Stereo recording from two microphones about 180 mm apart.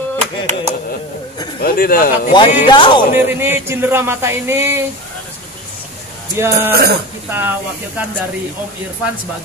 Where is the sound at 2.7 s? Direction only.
25° left (ahead or behind).